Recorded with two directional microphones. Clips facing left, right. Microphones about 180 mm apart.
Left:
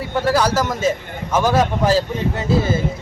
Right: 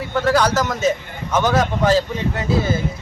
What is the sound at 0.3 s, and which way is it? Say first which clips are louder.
Speech: even; 10° left (ahead or behind).